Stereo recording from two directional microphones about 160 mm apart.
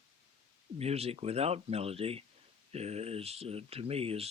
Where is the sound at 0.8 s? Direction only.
40° right (ahead or behind).